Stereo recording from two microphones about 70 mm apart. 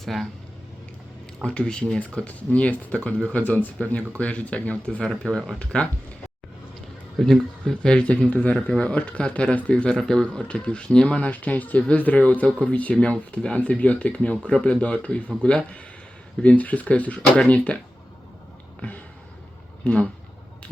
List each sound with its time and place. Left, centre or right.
0.0 s speech: centre
1.5 s speech: centre
7.2 s speech: centre
19.8 s speech: centre